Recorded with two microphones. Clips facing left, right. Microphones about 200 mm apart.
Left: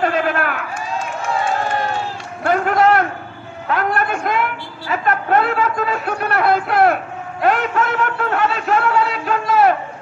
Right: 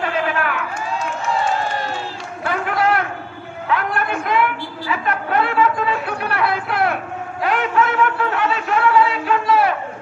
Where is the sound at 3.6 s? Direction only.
45° left (ahead or behind).